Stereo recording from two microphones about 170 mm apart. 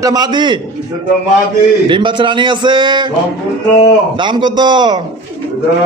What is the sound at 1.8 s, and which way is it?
A man's voice, 30° right (ahead or behind).